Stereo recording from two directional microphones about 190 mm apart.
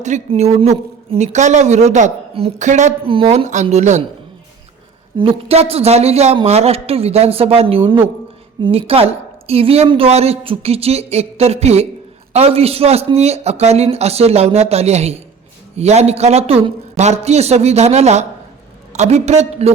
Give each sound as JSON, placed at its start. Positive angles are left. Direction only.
{"t": 0.0, "sound": "a woman's voice", "side_deg": -35}
{"t": 5.1, "sound": "a woman's voice", "side_deg": -30}